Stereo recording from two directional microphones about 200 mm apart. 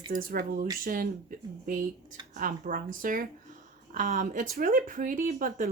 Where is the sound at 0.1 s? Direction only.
45° right (ahead or behind).